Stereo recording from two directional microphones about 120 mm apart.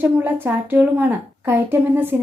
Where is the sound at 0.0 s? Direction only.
15° right (ahead or behind).